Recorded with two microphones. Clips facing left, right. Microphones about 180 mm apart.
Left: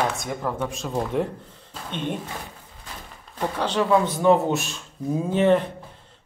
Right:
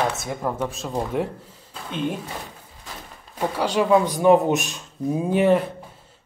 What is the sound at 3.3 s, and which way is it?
A man's voice, 10° right (ahead or behind).